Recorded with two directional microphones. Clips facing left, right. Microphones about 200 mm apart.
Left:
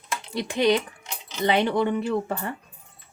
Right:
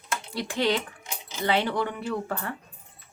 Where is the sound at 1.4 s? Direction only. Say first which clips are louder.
Left 4 dB; 20° left (ahead or behind).